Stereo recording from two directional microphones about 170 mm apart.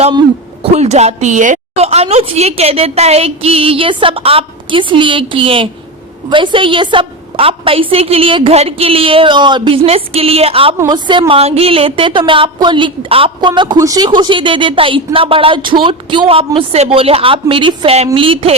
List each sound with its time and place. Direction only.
0.6 s a woman's voice: 40° right (ahead or behind)